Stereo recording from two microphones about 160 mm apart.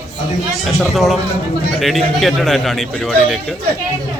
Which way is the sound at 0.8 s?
Centre (ahead or behind).